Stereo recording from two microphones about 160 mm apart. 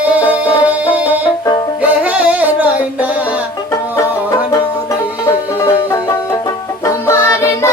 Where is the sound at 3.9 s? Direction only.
20° left (ahead or behind).